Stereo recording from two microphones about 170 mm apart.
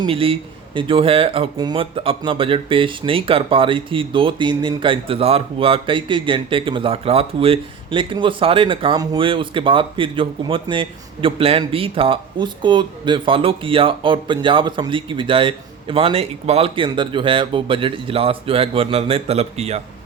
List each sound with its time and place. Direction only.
0.0 s speech: 35° right (ahead or behind)